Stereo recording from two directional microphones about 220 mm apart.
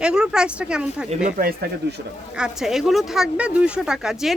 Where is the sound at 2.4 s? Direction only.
Centre (ahead or behind).